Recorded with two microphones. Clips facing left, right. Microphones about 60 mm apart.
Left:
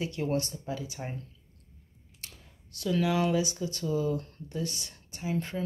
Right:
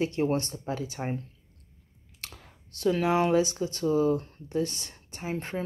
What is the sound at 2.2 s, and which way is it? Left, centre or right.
Computer keyboard, right.